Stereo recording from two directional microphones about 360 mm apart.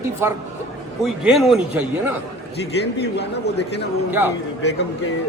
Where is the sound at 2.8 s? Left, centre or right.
Left.